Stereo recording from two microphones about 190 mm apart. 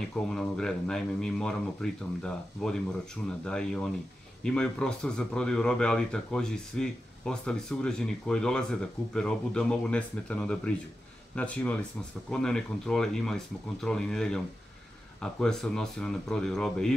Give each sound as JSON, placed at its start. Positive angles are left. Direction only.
{"t": 0.3, "sound": "speech", "side_deg": 5}